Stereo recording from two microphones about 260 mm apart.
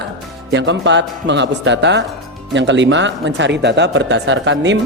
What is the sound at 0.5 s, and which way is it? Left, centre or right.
Speech, right.